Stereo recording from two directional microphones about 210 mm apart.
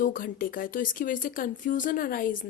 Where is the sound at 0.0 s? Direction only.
40° left (ahead or behind).